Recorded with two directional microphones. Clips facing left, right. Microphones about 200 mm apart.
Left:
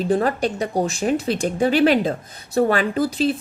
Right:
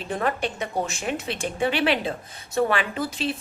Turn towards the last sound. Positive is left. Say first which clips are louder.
# left 8 dB
turn(degrees=40)  # may be behind; listen again after turning